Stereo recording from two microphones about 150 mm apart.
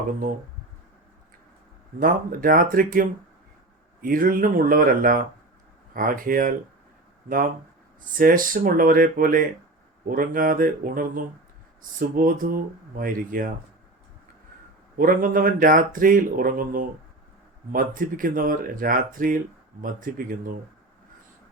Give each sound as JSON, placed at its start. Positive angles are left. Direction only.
{"t": 2.0, "sound": "speech", "side_deg": -70}
{"t": 8.1, "sound": "speech", "side_deg": -65}
{"t": 14.9, "sound": "speech", "side_deg": -65}